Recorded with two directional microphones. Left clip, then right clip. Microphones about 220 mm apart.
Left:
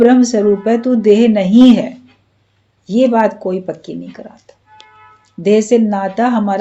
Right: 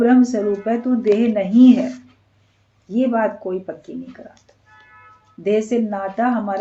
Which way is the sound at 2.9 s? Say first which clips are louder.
Left 7 dB; 40° left (ahead or behind).